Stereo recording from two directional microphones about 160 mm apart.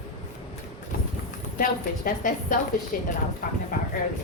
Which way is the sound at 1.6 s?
55° left (ahead or behind).